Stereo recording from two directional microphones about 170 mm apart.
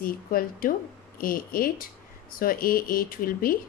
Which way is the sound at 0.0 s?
60° left (ahead or behind).